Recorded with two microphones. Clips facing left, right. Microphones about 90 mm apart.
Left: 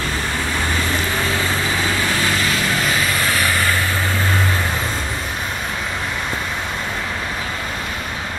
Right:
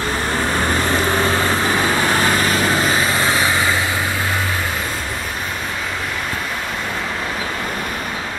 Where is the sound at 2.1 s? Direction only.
40° right (ahead or behind); by 3.9 s 15° right (ahead or behind).